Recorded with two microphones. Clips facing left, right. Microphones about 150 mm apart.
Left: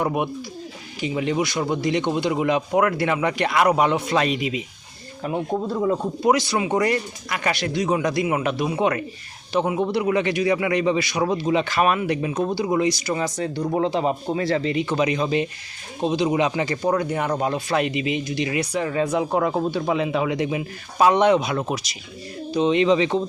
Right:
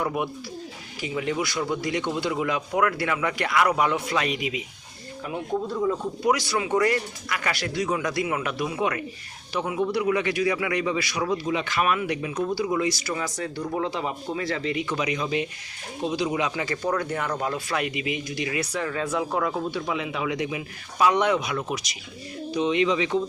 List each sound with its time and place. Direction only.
0.0 s a man's voice: 20° left (ahead or behind); by 5.4 s 35° left (ahead or behind)
6.2 s a man's voice: 25° left (ahead or behind)